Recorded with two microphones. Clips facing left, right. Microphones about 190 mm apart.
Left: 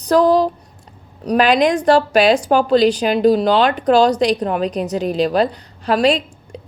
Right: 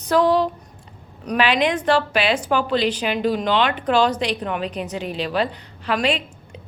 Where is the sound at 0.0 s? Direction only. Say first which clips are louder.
Left 4 dB; 35° left (ahead or behind).